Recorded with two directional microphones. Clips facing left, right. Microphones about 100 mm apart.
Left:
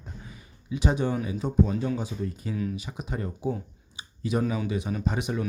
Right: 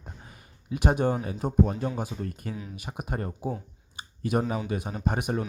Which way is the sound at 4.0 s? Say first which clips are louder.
Right 1 dB; 50° right (ahead or behind).